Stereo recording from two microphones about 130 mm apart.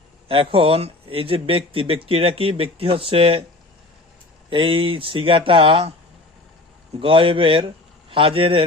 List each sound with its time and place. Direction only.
0.3 s speech: 45° right (ahead or behind)
4.4 s speech: 40° right (ahead or behind)
7.0 s speech: 40° right (ahead or behind)